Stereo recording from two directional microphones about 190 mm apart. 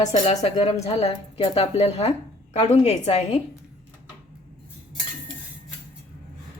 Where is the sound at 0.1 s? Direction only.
30° left (ahead or behind).